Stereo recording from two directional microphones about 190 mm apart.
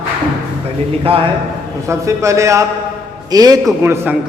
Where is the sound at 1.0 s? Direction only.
30° right (ahead or behind).